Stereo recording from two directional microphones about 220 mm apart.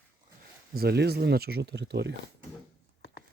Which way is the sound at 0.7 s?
45° right (ahead or behind).